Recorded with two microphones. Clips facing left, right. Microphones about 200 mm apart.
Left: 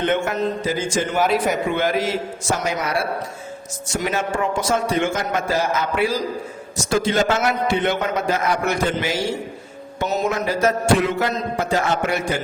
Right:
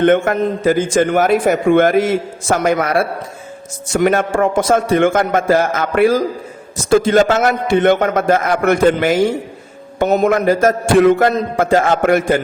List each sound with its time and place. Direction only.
0.0 s a man's voice: 55° right (ahead or behind)